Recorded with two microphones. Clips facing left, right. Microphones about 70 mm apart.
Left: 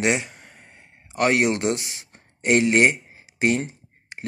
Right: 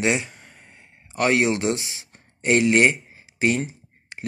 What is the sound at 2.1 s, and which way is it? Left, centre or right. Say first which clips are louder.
Speech: even; left.